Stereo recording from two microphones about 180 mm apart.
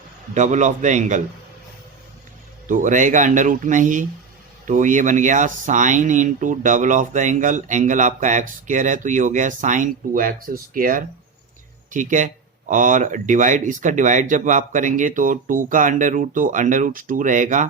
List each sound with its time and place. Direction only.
0.3 s speech: 40° right (ahead or behind)
2.6 s speech: 45° right (ahead or behind)